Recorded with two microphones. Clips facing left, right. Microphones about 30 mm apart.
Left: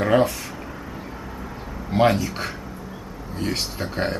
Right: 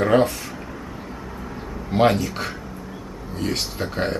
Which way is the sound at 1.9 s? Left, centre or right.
Centre.